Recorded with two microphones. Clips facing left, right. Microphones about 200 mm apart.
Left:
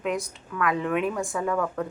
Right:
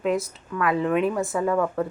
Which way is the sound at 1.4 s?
15° right (ahead or behind).